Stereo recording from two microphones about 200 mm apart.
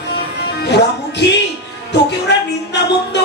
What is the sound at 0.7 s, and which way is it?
Music, 60° left (ahead or behind).